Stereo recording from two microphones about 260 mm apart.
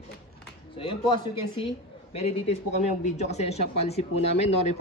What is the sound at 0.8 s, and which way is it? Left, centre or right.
Speech, centre.